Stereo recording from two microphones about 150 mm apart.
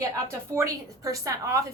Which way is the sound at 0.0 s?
20° right (ahead or behind).